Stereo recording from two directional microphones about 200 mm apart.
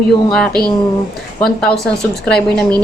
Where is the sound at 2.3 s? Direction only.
5° left (ahead or behind).